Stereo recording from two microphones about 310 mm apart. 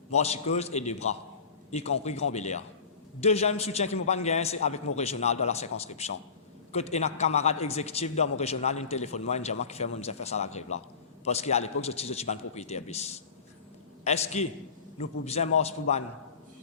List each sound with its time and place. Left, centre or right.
0.1 s a man's voice: left